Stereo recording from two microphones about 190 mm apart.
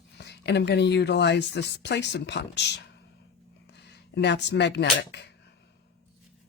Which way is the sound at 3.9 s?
65° left (ahead or behind).